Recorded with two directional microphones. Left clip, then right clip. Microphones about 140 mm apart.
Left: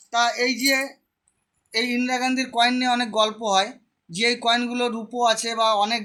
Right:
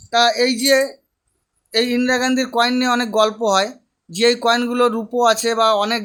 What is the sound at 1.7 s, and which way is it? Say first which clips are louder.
Speech: right 6 dB; 90° right.